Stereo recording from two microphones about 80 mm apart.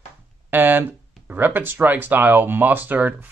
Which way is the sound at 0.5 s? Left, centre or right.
Right.